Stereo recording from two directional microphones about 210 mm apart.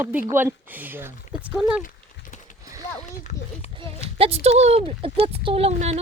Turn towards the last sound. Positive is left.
turn(degrees=-30)  # may be behind; listen again after turning